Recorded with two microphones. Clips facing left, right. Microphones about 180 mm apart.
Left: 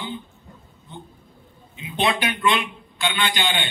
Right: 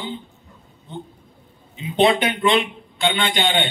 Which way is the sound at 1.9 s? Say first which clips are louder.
Right 6 dB; 20° right (ahead or behind).